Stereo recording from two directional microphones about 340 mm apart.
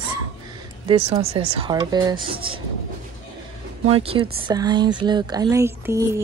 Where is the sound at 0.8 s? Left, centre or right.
Centre.